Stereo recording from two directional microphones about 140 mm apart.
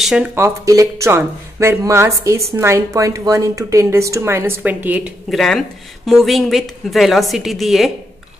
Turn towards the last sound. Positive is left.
turn(degrees=0)  # may be behind; listen again after turning